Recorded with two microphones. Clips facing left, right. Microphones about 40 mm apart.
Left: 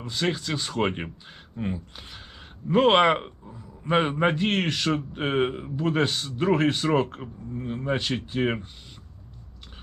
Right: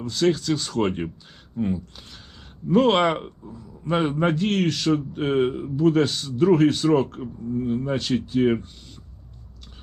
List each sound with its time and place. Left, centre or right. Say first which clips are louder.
0.0 s a man's voice: right 6 dB; centre